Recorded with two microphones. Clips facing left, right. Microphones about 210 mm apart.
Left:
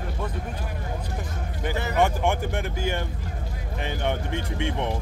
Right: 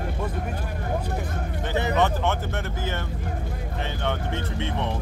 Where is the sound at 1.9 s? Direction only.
15° left (ahead or behind).